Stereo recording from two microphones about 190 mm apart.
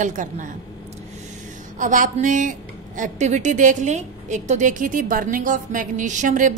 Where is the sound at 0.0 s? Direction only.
45° right (ahead or behind).